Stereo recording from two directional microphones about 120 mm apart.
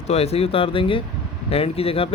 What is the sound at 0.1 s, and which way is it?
Speech, 60° left (ahead or behind).